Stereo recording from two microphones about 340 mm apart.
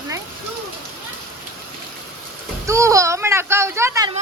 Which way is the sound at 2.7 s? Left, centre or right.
Centre.